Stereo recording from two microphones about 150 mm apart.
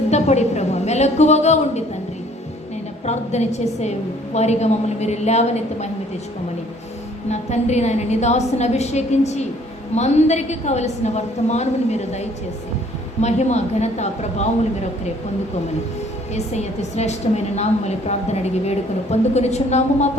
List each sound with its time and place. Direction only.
0.1 s a woman's voice: 50° left (ahead or behind)
3.1 s a woman's voice: 50° left (ahead or behind)
7.3 s a woman's voice: 50° left (ahead or behind)
16.3 s a woman's voice: 50° left (ahead or behind)